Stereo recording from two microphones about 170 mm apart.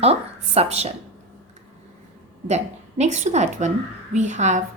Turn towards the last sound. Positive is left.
turn(degrees=-45)  # may be behind; listen again after turning